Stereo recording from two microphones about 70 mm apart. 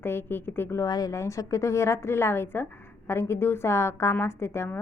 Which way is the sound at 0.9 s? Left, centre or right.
Left.